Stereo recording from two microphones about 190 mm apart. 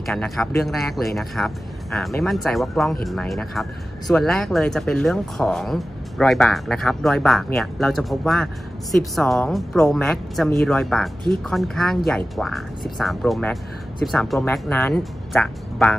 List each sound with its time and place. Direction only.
0.0 s speech: 5° left (ahead or behind)
14.4 s speech: 10° left (ahead or behind)